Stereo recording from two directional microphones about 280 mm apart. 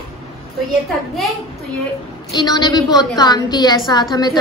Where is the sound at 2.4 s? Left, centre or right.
Centre.